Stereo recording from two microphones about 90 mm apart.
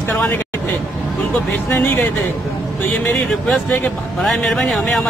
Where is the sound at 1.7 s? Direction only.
20° left (ahead or behind).